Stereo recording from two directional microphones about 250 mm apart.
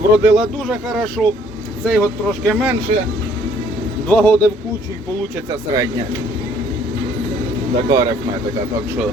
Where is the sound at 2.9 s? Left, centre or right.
Right.